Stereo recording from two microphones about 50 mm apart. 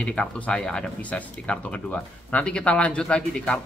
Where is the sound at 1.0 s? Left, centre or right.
Left.